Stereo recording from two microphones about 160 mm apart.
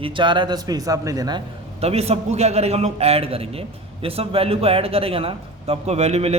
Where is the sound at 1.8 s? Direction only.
40° right (ahead or behind).